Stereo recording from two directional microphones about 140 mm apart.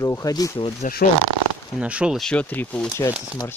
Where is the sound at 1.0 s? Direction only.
90° left.